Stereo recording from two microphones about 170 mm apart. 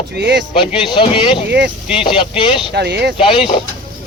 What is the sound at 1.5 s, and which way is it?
Speech, 90° right.